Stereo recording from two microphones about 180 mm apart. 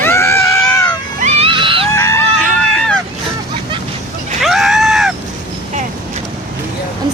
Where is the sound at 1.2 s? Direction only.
30° right (ahead or behind).